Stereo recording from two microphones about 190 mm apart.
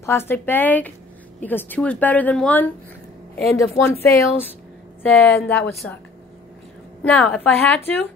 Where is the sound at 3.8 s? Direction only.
15° left (ahead or behind).